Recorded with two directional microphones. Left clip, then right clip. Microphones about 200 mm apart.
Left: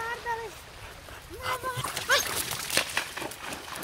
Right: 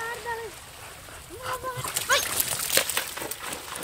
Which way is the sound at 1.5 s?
25° left (ahead or behind).